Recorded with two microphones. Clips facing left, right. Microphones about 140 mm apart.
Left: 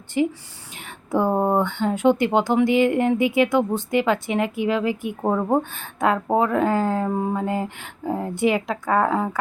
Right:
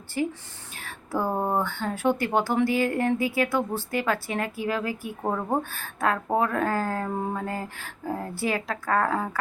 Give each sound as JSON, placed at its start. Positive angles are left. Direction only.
{"t": 0.2, "sound": "speech", "side_deg": 15}